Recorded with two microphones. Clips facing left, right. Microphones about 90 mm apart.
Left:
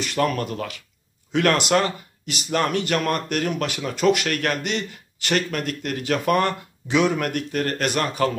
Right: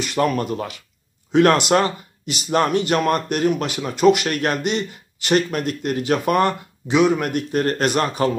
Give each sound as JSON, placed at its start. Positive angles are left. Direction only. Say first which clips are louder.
{"t": 0.0, "sound": "speech", "louder": "right 3 dB", "side_deg": -15}